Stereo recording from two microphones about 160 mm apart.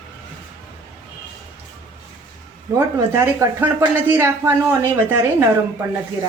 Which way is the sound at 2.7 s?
15° right (ahead or behind).